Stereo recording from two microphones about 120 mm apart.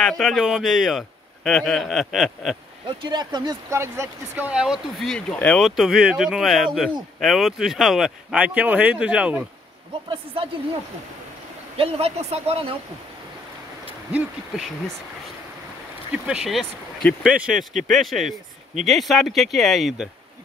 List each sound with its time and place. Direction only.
0.2 s a man's voice: centre (ahead or behind)
2.9 s speech: 40° right (ahead or behind)
3.7 s speech: 25° right (ahead or behind)
4.5 s speech: 5° right (ahead or behind)
5.0 s speech: 5° left (ahead or behind)
5.8 s a man's voice: 5° right (ahead or behind)
10.0 s a woman's voice: 50° right (ahead or behind)
11.7 s speech: 55° right (ahead or behind)
16.3 s a man's voice: 5° right (ahead or behind)